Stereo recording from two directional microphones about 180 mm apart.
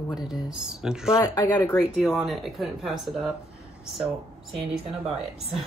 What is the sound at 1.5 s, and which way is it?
Speech, 10° left (ahead or behind).